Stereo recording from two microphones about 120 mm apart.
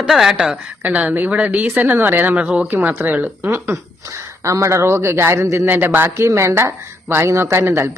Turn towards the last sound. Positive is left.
turn(degrees=-20)  # may be behind; listen again after turning